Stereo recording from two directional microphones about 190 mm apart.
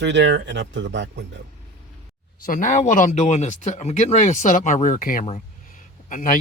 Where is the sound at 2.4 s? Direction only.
45° left (ahead or behind).